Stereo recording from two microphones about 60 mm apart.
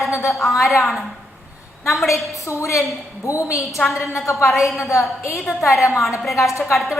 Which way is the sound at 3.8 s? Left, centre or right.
Centre.